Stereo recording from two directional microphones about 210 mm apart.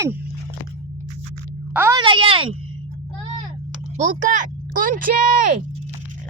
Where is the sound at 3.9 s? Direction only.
35° right (ahead or behind).